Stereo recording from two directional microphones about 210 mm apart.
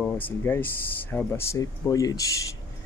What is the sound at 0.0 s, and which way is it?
Speech, 10° left (ahead or behind).